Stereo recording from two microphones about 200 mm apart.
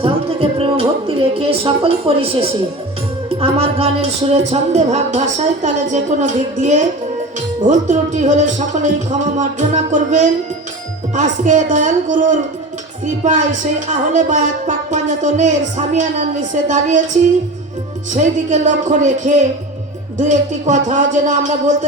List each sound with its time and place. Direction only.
0.0 s a woman's voice: 30° right (ahead or behind)
18.2 s speech: 35° right (ahead or behind)